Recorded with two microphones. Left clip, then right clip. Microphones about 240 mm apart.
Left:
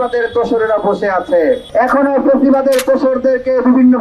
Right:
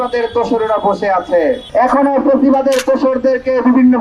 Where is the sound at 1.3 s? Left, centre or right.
Right.